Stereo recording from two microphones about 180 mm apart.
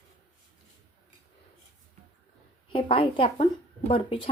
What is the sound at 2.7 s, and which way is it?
Speech, 30° left (ahead or behind).